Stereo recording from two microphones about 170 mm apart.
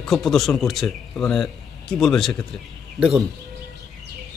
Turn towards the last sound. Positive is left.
turn(degrees=-5)  # may be behind; listen again after turning